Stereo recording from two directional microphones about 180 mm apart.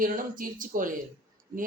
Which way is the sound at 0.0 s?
50° right (ahead or behind).